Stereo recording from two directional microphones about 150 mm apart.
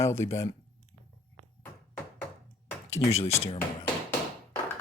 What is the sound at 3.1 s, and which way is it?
Speech, 45° left (ahead or behind).